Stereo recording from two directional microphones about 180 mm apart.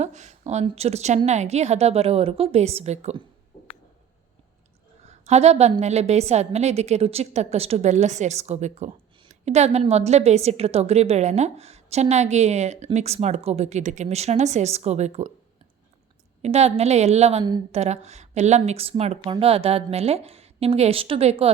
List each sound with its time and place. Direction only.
0.0 s a woman's voice: 40° right (ahead or behind)
5.0 s a sound: 35° right (ahead or behind)
5.8 s a woman's voice: 35° right (ahead or behind)
16.4 s a woman's voice: 35° right (ahead or behind)